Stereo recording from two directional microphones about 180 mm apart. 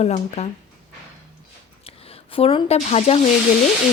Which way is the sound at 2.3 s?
30° left (ahead or behind).